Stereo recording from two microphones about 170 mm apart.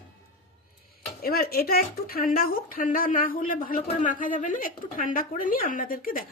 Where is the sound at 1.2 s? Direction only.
65° left (ahead or behind).